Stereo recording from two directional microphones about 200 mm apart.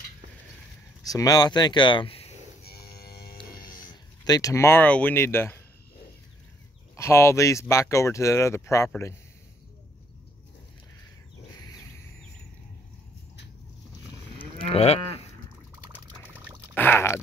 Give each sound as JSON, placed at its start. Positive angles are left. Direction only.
{"t": 1.0, "sound": "speech", "side_deg": 20}
{"t": 2.6, "sound": "livestock", "side_deg": 50}
{"t": 3.3, "sound": "a sound", "side_deg": 20}
{"t": 7.0, "sound": "speech", "side_deg": 15}
{"t": 14.7, "sound": "livestock", "side_deg": 30}
{"t": 16.7, "sound": "a sound", "side_deg": 10}